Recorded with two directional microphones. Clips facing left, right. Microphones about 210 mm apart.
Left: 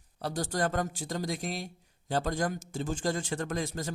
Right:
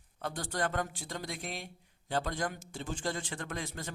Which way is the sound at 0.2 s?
40° left (ahead or behind).